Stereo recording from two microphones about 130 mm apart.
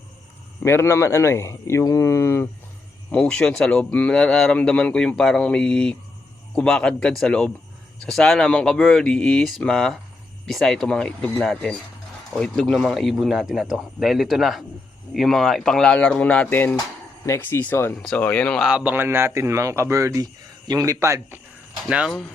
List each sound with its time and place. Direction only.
0.6 s speech: 20° left (ahead or behind)
3.1 s speech: 5° left (ahead or behind)
18.7 s speech: 10° right (ahead or behind)
21.8 s speech: 5° right (ahead or behind)